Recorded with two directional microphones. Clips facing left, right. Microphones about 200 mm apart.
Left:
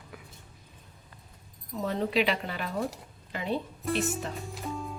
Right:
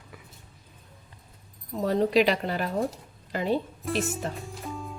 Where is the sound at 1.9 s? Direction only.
40° right (ahead or behind).